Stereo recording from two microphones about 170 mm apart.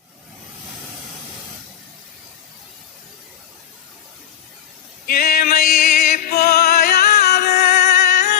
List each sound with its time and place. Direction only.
5.0 s music: 60° left (ahead or behind)
7.2 s music: 45° left (ahead or behind)